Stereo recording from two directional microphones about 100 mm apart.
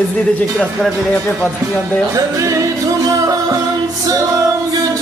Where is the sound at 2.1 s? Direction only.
35° right (ahead or behind).